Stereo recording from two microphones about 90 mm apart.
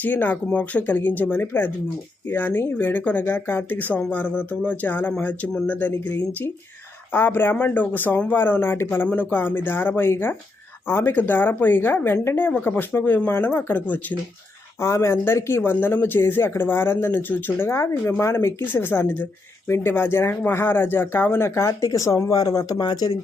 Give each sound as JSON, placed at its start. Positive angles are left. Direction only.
{"t": 0.0, "sound": "a woman's voice", "side_deg": 20}
{"t": 14.8, "sound": "a woman's voice", "side_deg": 30}